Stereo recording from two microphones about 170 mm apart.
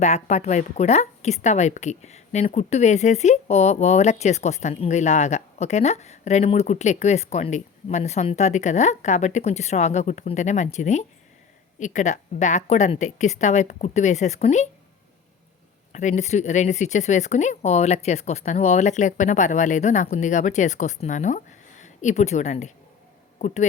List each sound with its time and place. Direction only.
0.0 s a woman's voice: 40° left (ahead or behind)
15.9 s speech: 45° left (ahead or behind)